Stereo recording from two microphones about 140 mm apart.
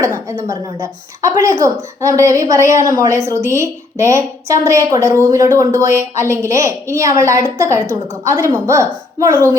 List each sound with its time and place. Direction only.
0.0 s speech: 20° right (ahead or behind)